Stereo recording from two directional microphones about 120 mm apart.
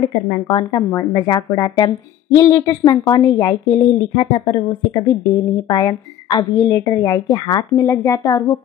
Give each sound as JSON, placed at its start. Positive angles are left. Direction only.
{"t": 0.3, "sound": "speech", "side_deg": 45}
{"t": 0.7, "sound": "a woman's voice", "side_deg": 30}
{"t": 7.8, "sound": "a woman's voice", "side_deg": 25}